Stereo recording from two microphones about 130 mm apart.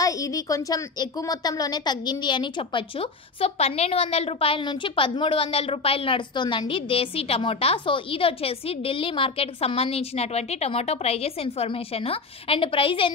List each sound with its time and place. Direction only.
0.0 s a woman's voice: 25° left (ahead or behind); by 13.1 s 45° left (ahead or behind)